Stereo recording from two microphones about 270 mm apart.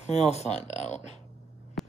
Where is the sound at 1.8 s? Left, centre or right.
Centre.